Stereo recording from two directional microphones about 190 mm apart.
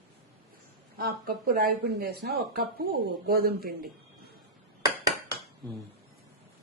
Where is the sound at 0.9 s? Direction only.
50° right (ahead or behind).